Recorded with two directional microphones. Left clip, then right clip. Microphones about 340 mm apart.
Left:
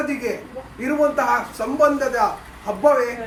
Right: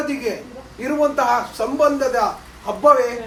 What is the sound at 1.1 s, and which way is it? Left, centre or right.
Speech, centre.